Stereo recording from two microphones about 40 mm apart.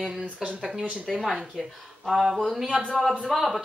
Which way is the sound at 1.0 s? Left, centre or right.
Centre.